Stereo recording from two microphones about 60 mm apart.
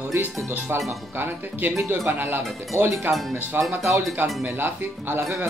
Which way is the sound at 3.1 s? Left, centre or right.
Centre.